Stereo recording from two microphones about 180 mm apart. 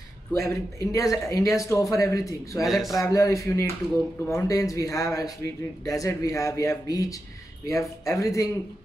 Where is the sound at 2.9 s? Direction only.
20° left (ahead or behind).